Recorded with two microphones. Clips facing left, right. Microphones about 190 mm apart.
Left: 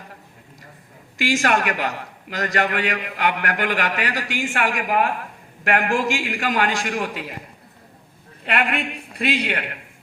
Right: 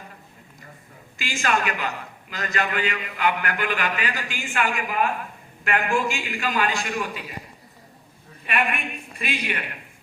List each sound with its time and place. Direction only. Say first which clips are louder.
1.2 s a man's voice: left 5 dB; 85° left; by 5.1 s 70° left (ahead or behind)
5.6 s a man's voice: left 3 dB; 80° left
8.4 s a man's voice: left 3 dB; 70° left (ahead or behind)